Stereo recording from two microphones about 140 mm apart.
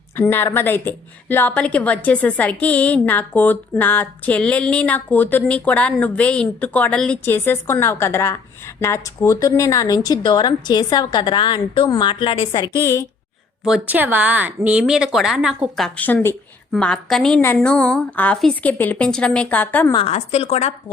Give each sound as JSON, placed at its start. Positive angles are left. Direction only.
{"t": 0.2, "sound": "a woman's voice", "side_deg": 15}
{"t": 7.3, "sound": "a woman's voice", "side_deg": 15}
{"t": 12.6, "sound": "a woman's voice", "side_deg": 25}
{"t": 13.7, "sound": "a woman's voice", "side_deg": -10}
{"t": 16.0, "sound": "a woman's voice", "side_deg": 10}
{"t": 20.1, "sound": "a woman's voice", "side_deg": 50}